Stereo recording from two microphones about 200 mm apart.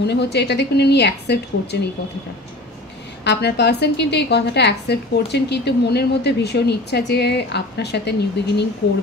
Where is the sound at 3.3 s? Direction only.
55° left (ahead or behind).